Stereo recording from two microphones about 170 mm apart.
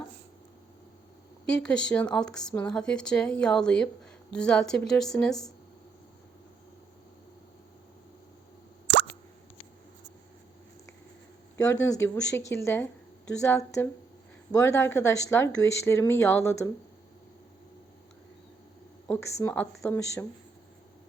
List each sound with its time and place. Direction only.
1.6 s speech: 5° left (ahead or behind)
11.5 s speech: 15° left (ahead or behind)
19.0 s speech: 15° left (ahead or behind)